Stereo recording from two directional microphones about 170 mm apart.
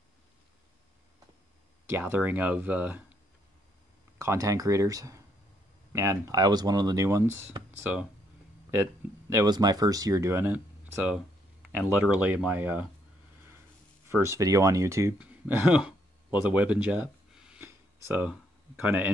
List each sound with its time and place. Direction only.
1.9 s speech: 10° right (ahead or behind)
4.2 s speech: 15° right (ahead or behind)
9.3 s speech: 20° right (ahead or behind)
11.9 s speech: 10° right (ahead or behind)
14.0 s speech: 15° right (ahead or behind)